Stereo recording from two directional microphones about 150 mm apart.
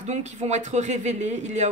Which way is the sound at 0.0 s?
50° right (ahead or behind).